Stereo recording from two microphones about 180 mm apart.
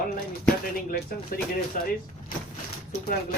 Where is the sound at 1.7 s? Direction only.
50° left (ahead or behind).